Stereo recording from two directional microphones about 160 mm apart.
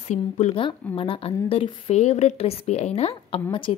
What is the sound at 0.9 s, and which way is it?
A woman's voice, 35° left (ahead or behind).